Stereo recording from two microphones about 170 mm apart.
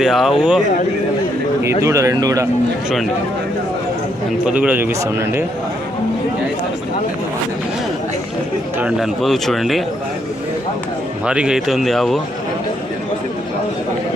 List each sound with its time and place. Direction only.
0.0 s a man's voice: centre (ahead or behind)
1.8 s a man's voice: 20° right (ahead or behind)
4.4 s a man's voice: 10° right (ahead or behind)
8.8 s a man's voice: centre (ahead or behind)
11.3 s a man's voice: 5° right (ahead or behind)